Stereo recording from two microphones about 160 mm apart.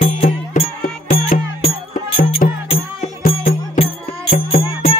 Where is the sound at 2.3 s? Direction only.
40° left (ahead or behind).